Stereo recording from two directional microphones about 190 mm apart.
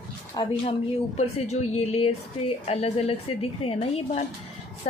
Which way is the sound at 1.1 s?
35° left (ahead or behind).